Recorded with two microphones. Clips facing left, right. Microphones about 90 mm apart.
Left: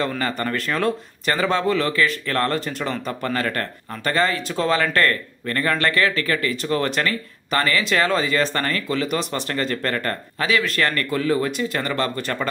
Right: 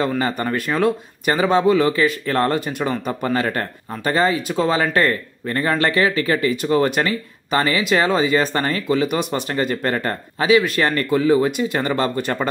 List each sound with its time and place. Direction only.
0.2 s speech: 20° right (ahead or behind)